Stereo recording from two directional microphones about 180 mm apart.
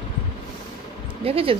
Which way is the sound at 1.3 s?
30° right (ahead or behind).